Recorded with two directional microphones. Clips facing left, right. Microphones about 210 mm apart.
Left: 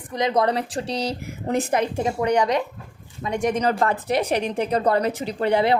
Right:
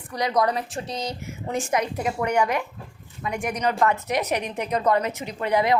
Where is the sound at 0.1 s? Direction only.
25° left (ahead or behind).